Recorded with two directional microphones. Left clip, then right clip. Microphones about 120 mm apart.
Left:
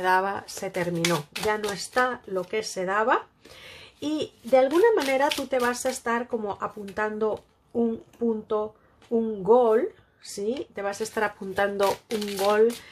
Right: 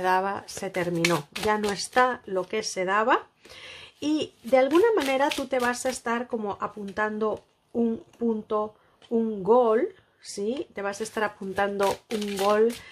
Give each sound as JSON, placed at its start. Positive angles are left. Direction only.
{"t": 0.0, "sound": "speech", "side_deg": -15}
{"t": 1.7, "sound": "speech", "side_deg": -35}
{"t": 12.1, "sound": "speech", "side_deg": 0}
{"t": 12.4, "sound": "speech", "side_deg": -20}